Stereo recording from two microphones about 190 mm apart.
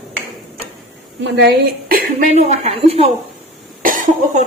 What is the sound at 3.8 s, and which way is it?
Cough, 45° right (ahead or behind).